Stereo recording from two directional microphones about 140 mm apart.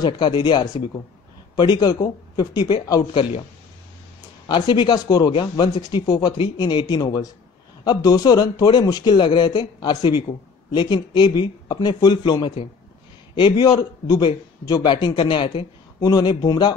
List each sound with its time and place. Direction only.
0.0 s a man's voice: 30° left (ahead or behind)
4.5 s a man's voice: 30° left (ahead or behind)